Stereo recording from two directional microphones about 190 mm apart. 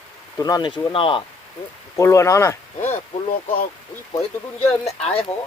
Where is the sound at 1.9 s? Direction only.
15° left (ahead or behind).